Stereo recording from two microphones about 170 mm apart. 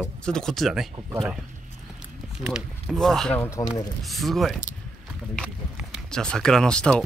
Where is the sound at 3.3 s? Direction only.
15° left (ahead or behind).